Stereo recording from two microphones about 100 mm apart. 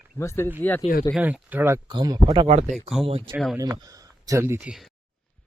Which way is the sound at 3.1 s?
80° right.